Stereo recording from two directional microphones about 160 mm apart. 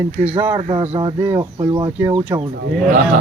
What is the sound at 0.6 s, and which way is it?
Speech, 30° right (ahead or behind).